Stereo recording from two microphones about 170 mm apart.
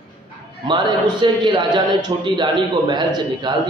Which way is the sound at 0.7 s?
30° right (ahead or behind).